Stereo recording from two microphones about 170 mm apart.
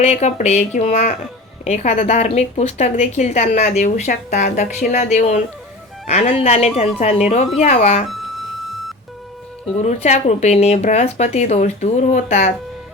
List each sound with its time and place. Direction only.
0.0 s speech: 40° left (ahead or behind)
9.8 s speech: 40° left (ahead or behind)